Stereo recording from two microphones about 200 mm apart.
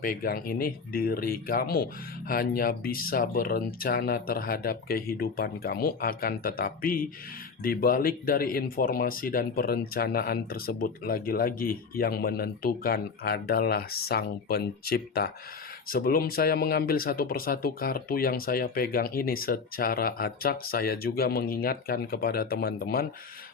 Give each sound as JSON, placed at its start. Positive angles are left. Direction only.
{"t": 0.0, "sound": "speech", "side_deg": 45}